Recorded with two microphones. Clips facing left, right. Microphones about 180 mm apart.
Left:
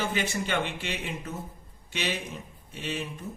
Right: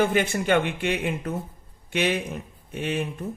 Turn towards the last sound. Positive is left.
turn(degrees=-55)  # may be behind; listen again after turning